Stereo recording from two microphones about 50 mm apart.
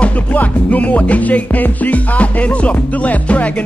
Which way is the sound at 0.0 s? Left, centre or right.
Left.